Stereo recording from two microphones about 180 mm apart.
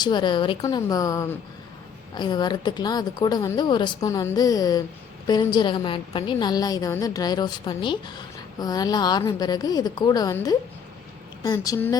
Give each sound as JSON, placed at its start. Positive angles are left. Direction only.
{"t": 0.0, "sound": "a woman's voice", "side_deg": 25}